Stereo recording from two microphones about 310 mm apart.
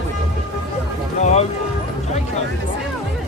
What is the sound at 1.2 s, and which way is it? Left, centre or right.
Music, left.